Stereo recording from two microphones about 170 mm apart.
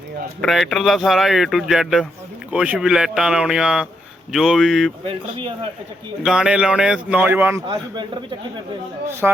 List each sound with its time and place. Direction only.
0.4 s speech: centre (ahead or behind)
5.0 s speech: 30° right (ahead or behind)
6.2 s speech: 5° right (ahead or behind)
9.2 s speech: 5° right (ahead or behind)